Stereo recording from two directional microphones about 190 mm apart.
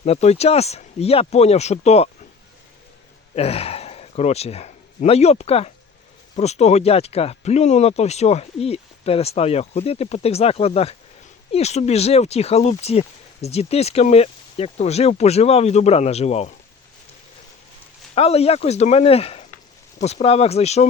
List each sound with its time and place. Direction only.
0.0 s speech: 35° left (ahead or behind)
3.3 s speech: 30° left (ahead or behind)
18.1 s speech: 30° left (ahead or behind)